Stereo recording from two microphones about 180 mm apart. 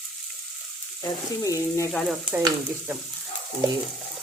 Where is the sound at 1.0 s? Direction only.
20° left (ahead or behind).